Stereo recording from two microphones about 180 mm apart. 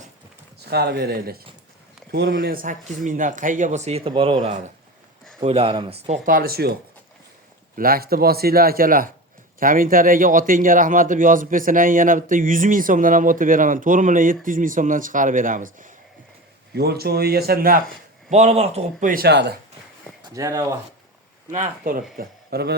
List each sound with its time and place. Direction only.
0.7 s a man's voice: 65° right (ahead or behind); by 6.1 s 35° right (ahead or behind)
6.2 s a man's voice: 55° right (ahead or behind)
7.8 s a man's voice: 55° right (ahead or behind)
16.7 s a man's voice: 65° right (ahead or behind)
18.3 s a man's voice: 40° right (ahead or behind); by 19.5 s 65° right (ahead or behind)
20.2 s speech: 20° right (ahead or behind)
21.5 s speech: 45° right (ahead or behind)
22.2 s a man's voice: 60° right (ahead or behind)